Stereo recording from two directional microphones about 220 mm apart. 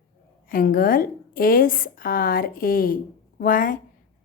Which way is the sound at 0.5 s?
40° left (ahead or behind).